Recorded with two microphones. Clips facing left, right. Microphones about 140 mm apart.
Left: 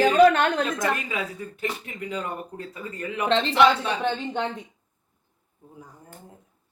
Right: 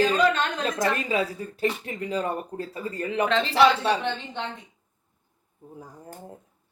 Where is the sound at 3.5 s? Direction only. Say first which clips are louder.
Even; 35° right (ahead or behind).